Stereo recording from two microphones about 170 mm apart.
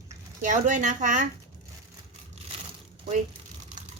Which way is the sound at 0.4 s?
45° right (ahead or behind).